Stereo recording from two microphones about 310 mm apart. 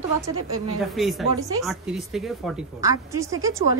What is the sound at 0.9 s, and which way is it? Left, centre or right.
A woman's voice, centre.